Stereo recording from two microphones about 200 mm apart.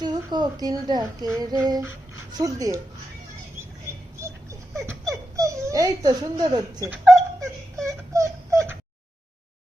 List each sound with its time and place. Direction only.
0.0 s speech: 20° right (ahead or behind)
4.7 s a sound: 15° right (ahead or behind)
5.4 s speech: 15° right (ahead or behind)
7.1 s whimper: 15° right (ahead or behind)